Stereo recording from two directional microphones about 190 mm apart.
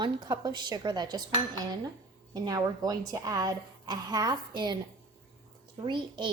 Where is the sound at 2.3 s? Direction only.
20° right (ahead or behind).